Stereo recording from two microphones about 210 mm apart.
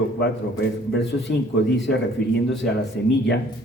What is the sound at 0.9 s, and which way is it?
A man's voice, 55° left (ahead or behind).